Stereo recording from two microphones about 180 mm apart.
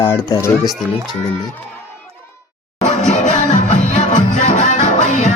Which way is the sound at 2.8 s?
40° left (ahead or behind).